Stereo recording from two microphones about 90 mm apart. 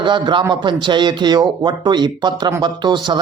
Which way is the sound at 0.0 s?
60° right (ahead or behind).